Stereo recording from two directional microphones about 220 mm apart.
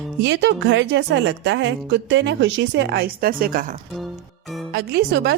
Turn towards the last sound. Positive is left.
turn(degrees=-50)  # may be behind; listen again after turning